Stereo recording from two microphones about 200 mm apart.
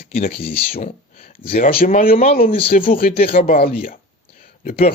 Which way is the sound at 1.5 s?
45° left (ahead or behind).